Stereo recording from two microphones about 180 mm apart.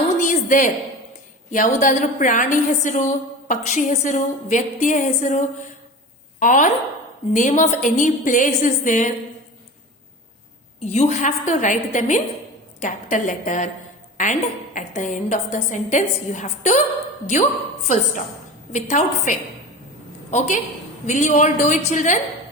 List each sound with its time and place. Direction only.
0.2 s a sound: 45° left (ahead or behind)
1.5 s a woman's voice: 45° left (ahead or behind)
10.8 s a woman's voice: 35° left (ahead or behind)
17.8 s a woman's voice: 45° left (ahead or behind)